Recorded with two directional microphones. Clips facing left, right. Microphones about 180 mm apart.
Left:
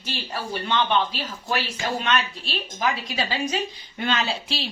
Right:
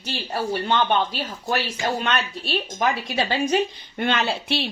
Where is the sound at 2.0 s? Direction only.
55° right (ahead or behind).